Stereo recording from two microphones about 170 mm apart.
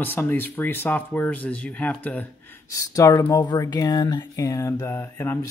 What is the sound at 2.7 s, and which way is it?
Speech, 20° left (ahead or behind).